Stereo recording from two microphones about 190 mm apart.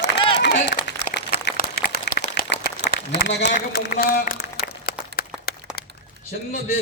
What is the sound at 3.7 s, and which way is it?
Speech, 55° left (ahead or behind).